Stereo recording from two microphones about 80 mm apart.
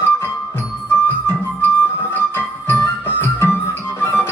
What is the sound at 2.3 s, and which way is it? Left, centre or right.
Music, left.